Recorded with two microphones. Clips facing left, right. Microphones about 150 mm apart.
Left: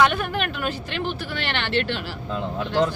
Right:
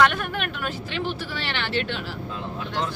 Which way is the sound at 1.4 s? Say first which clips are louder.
Left 4 dB; 65° left (ahead or behind).